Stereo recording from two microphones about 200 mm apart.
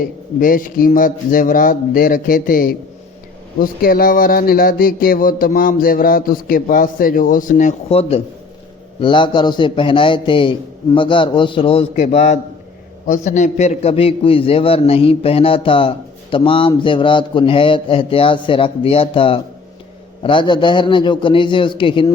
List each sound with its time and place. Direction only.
0.3 s a man's voice: 45° left (ahead or behind); by 22.1 s 25° left (ahead or behind)